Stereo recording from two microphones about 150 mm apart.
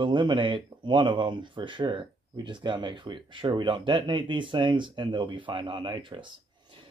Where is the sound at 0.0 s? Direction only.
30° right (ahead or behind).